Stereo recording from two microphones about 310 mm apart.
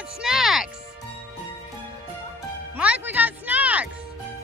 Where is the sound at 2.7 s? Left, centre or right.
Centre.